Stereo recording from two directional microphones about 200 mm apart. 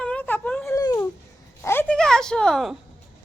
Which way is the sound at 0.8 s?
15° left (ahead or behind).